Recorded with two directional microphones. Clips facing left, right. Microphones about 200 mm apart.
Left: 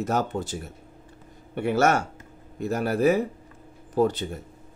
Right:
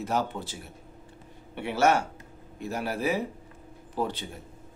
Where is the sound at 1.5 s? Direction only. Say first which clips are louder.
Left 2 dB; 45° left (ahead or behind).